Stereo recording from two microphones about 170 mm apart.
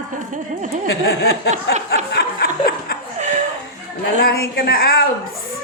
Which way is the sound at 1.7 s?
85° left.